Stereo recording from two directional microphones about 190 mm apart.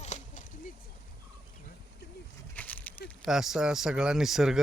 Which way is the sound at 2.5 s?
10° left (ahead or behind).